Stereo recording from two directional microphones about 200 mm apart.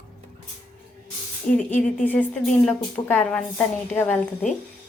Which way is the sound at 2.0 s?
10° left (ahead or behind).